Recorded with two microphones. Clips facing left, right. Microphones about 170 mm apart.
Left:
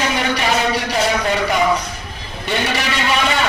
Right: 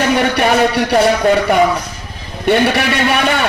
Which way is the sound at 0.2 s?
60° right (ahead or behind).